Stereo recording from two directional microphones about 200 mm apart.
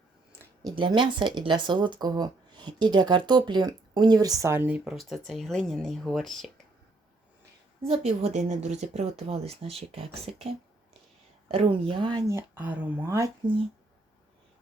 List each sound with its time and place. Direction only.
0.6 s speech: 20° right (ahead or behind); by 6.5 s centre (ahead or behind)
8.2 s speech: 35° right (ahead or behind); by 13.3 s 15° right (ahead or behind)